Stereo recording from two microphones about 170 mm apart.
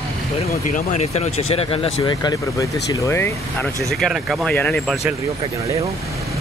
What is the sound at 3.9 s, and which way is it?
Speech, centre (ahead or behind).